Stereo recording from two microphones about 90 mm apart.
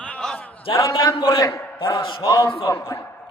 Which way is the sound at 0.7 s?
40° left (ahead or behind).